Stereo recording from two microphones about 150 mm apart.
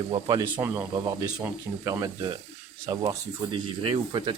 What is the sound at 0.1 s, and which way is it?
Speech, 30° right (ahead or behind).